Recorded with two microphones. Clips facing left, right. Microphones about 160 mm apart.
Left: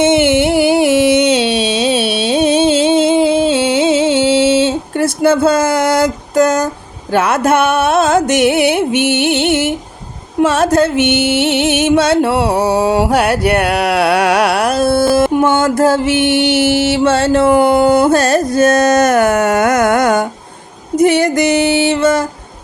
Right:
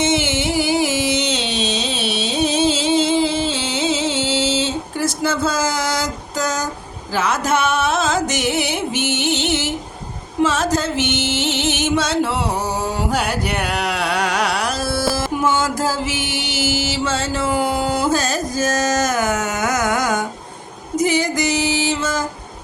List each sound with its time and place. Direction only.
0.0 s music: 60° left (ahead or behind)